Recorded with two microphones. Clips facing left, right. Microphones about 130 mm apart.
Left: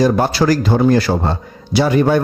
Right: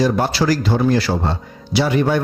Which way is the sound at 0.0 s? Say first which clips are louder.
Left 3 dB; 50° left (ahead or behind).